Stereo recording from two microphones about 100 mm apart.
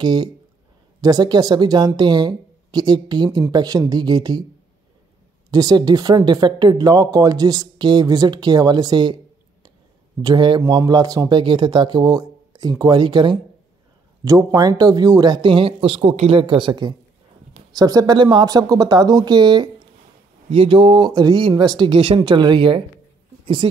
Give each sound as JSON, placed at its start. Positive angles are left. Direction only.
{"t": 0.0, "sound": "speech", "side_deg": -45}
{"t": 5.5, "sound": "speech", "side_deg": -40}
{"t": 10.2, "sound": "speech", "side_deg": -50}
{"t": 10.6, "sound": "speech", "side_deg": -35}
{"t": 14.2, "sound": "speech", "side_deg": -35}
{"t": 17.7, "sound": "speech", "side_deg": -40}
{"t": 20.5, "sound": "speech", "side_deg": -60}